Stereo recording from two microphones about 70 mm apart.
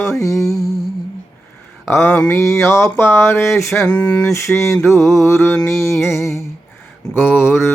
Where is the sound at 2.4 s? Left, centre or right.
Left.